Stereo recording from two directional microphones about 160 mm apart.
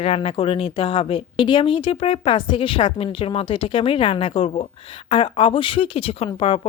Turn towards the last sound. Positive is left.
turn(degrees=35)  # may be behind; listen again after turning